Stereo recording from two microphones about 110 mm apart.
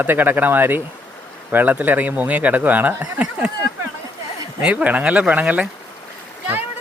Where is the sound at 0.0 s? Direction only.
20° right (ahead or behind).